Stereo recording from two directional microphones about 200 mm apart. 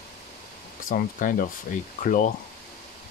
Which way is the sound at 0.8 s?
45° left (ahead or behind).